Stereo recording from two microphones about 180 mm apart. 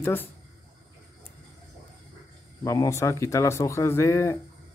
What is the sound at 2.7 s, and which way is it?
Speech, 15° left (ahead or behind).